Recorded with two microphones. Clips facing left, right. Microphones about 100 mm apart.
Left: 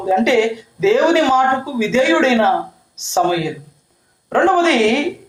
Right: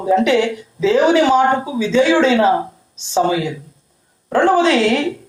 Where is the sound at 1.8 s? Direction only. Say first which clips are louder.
Right 1 dB; 40° right (ahead or behind).